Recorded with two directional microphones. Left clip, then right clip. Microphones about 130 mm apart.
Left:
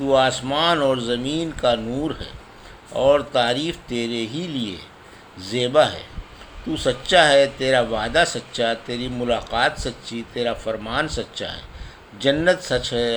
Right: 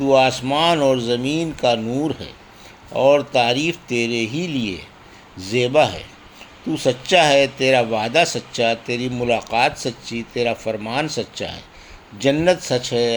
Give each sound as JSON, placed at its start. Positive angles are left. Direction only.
{"t": 0.0, "sound": "speech", "side_deg": -40}